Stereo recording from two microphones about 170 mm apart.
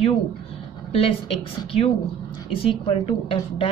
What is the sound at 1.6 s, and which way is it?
Speech, 35° left (ahead or behind).